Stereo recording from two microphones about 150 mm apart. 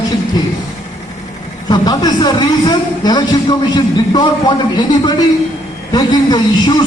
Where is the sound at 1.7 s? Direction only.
30° left (ahead or behind).